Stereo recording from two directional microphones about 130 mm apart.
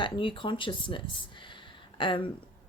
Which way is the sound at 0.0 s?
40° left (ahead or behind).